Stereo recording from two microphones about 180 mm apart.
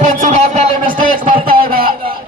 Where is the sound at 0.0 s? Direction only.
40° right (ahead or behind).